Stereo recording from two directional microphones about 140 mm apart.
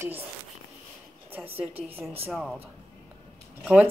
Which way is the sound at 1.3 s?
15° right (ahead or behind).